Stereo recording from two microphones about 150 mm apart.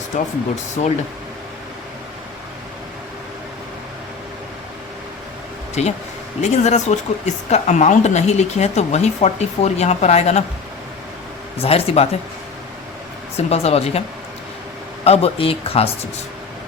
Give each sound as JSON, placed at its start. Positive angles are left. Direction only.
{"t": 0.1, "sound": "speech", "side_deg": 50}
{"t": 5.8, "sound": "speech", "side_deg": 50}
{"t": 11.5, "sound": "speech", "side_deg": 40}
{"t": 13.3, "sound": "speech", "side_deg": 45}
{"t": 15.0, "sound": "speech", "side_deg": 40}